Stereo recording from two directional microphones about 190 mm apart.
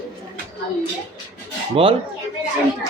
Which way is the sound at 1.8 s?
30° right (ahead or behind).